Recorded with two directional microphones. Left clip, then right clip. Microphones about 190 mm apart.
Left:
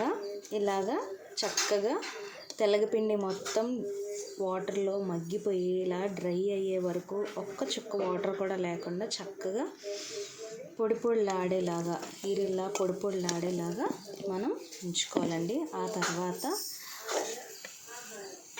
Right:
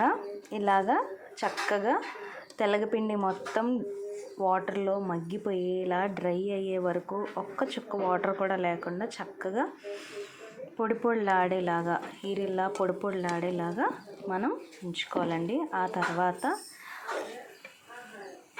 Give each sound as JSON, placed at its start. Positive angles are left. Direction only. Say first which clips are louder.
{"t": 0.0, "sound": "speech", "louder": "right 5 dB", "side_deg": 0}